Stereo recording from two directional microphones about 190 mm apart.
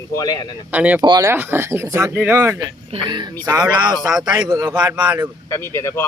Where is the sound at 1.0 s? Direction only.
25° right (ahead or behind).